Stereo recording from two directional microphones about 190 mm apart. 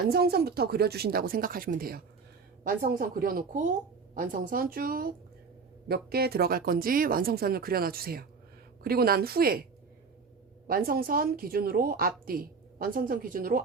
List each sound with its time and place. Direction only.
0.1 s a woman's voice: 55° right (ahead or behind)
10.7 s a woman's voice: 50° right (ahead or behind)